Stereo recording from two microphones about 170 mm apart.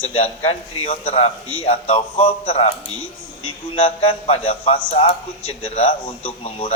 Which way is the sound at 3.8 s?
35° left (ahead or behind).